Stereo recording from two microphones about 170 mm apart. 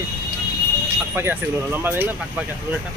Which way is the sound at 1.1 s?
15° right (ahead or behind).